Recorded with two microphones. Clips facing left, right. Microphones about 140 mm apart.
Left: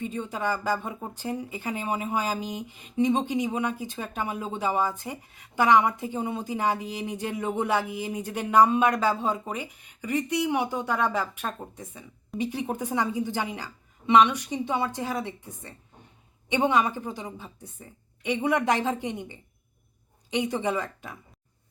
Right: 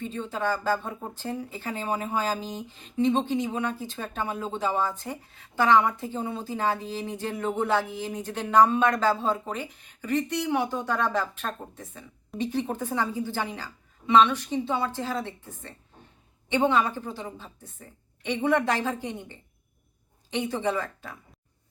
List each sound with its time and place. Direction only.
0.0 s speech: 15° left (ahead or behind)